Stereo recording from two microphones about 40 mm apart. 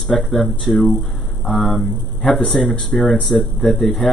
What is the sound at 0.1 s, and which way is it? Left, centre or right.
Speech, centre.